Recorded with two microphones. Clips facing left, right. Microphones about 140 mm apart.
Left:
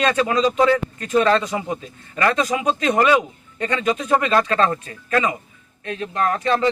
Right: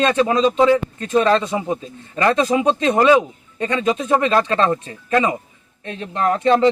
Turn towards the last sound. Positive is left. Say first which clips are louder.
# right 4 dB
turn(degrees=-20)  # may be behind; listen again after turning